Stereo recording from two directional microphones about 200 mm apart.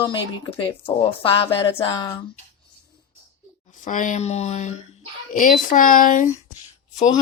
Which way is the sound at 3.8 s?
40° left (ahead or behind).